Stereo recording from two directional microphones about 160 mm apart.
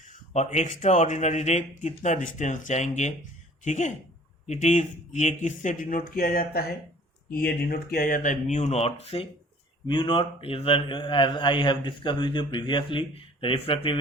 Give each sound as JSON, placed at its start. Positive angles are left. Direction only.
{"t": 0.0, "sound": "a man's voice", "side_deg": 50}